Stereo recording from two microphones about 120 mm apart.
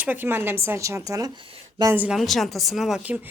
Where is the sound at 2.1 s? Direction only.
Centre (ahead or behind).